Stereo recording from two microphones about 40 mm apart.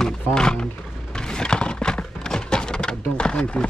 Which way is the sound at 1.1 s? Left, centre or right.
Centre.